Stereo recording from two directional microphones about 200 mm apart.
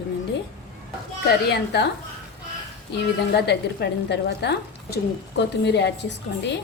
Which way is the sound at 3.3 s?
55° left (ahead or behind).